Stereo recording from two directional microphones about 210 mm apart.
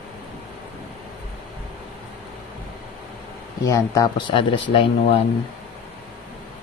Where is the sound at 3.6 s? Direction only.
15° left (ahead or behind).